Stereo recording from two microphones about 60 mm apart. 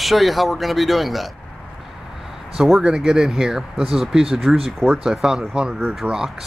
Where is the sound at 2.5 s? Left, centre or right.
Centre.